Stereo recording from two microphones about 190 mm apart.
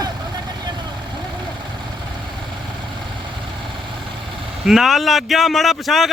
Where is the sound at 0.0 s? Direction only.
20° right (ahead or behind).